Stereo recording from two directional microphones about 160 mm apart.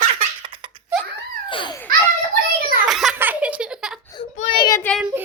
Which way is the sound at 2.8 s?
Centre (ahead or behind).